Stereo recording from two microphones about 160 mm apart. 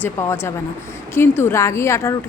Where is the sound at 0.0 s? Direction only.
15° left (ahead or behind).